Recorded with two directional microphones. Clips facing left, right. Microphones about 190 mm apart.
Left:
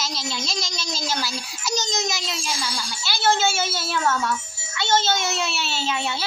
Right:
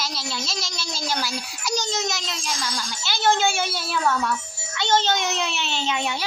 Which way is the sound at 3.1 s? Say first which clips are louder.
Even; 15° right (ahead or behind).